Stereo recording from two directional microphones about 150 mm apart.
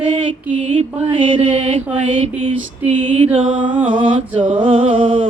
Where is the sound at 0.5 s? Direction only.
55° right (ahead or behind).